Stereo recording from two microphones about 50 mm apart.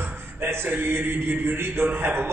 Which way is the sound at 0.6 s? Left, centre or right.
Right.